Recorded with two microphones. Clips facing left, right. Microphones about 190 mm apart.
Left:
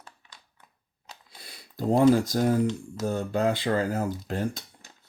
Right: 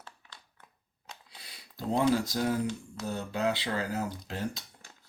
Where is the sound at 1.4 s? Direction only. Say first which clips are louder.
Left 7 dB; 45° left (ahead or behind).